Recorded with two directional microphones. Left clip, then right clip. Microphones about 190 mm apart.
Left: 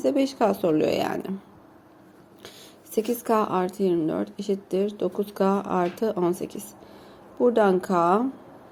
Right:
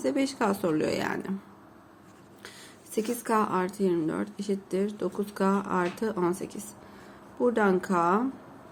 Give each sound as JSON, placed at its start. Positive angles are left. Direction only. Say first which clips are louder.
{"t": 0.0, "sound": "a woman's voice", "louder": "left 5 dB", "side_deg": 10}
{"t": 2.9, "sound": "a woman's voice", "louder": "left 4 dB", "side_deg": 15}